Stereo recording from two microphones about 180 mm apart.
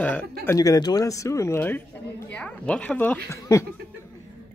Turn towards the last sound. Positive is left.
turn(degrees=15)  # may be behind; listen again after turning